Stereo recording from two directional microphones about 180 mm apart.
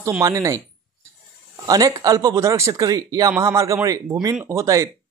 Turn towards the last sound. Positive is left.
turn(degrees=-15)  # may be behind; listen again after turning